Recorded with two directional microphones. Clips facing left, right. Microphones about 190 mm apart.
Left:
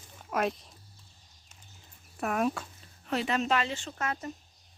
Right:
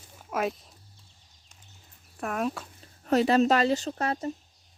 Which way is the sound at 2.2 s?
5° left (ahead or behind).